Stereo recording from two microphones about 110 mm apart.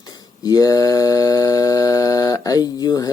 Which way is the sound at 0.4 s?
35° left (ahead or behind).